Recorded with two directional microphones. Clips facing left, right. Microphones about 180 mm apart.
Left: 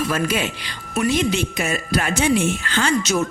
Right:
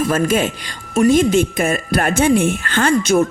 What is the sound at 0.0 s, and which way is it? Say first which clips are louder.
A woman's voice: right 5 dB; 45° right (ahead or behind).